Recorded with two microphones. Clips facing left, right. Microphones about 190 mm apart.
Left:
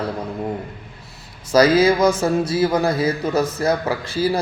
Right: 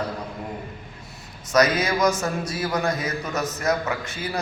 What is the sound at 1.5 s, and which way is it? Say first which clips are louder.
A man's voice: left 7 dB; 30° left (ahead or behind).